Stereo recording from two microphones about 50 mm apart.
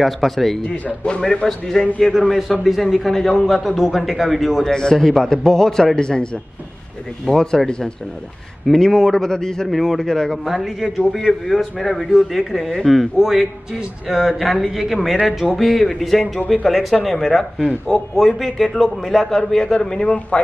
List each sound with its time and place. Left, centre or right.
0.0 s a man's voice: centre
0.7 s speech: left
1.2 s a man's voice: centre
2.0 s a man's voice: centre
4.6 s a man's voice: centre
7.2 s a man's voice: centre
9.7 s a man's voice: centre
10.4 s a man's voice: centre
20.1 s speech: left